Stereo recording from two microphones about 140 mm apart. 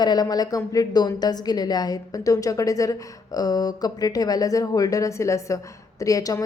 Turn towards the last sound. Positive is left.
turn(degrees=25)  # may be behind; listen again after turning